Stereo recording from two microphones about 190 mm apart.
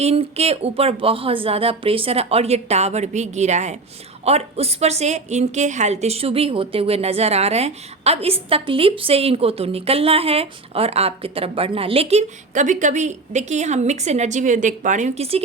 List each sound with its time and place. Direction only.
0.0 s a woman's voice: 35° right (ahead or behind)